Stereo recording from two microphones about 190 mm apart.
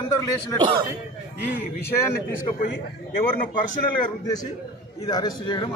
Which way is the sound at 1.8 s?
15° left (ahead or behind).